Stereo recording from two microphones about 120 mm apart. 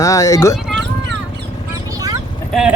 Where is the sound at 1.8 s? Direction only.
30° right (ahead or behind).